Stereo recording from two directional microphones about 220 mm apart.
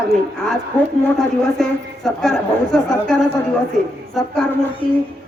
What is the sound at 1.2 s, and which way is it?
A man's voice, centre (ahead or behind).